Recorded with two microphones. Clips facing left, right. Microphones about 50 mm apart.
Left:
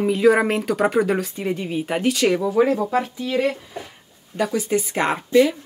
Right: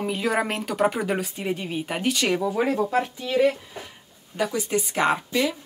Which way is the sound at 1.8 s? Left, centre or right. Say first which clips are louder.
Left 5 dB; centre.